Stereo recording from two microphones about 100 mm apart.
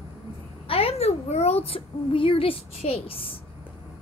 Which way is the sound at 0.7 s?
80° left.